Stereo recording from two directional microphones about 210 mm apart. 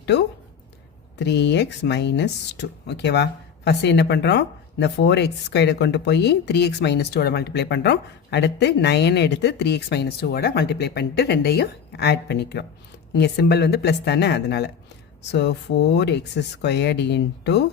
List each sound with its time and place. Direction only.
0.0 s a woman's voice: 55° left (ahead or behind)